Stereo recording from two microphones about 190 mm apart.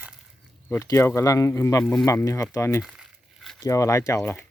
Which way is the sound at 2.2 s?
15° left (ahead or behind).